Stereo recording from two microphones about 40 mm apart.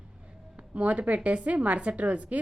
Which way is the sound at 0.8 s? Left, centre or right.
Right.